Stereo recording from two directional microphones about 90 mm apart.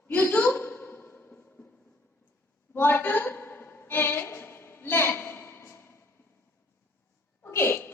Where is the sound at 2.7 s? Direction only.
20° left (ahead or behind).